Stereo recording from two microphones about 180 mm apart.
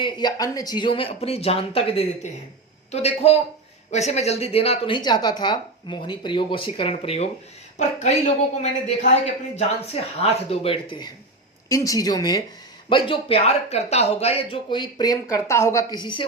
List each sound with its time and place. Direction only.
0.0 s speech: 25° left (ahead or behind)